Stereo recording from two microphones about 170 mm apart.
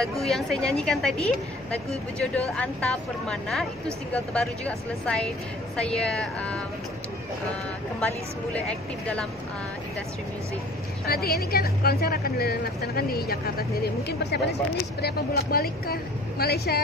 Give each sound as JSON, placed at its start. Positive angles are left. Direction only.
{"t": 0.0, "sound": "a woman's voice", "side_deg": 0}
{"t": 8.5, "sound": "speech", "side_deg": 5}
{"t": 11.1, "sound": "speech", "side_deg": 65}